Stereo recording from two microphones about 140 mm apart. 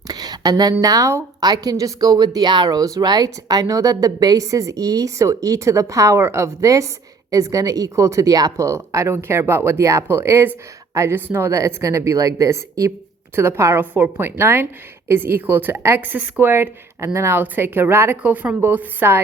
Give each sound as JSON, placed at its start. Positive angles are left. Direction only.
{"t": 0.1, "sound": "a woman's voice", "side_deg": -30}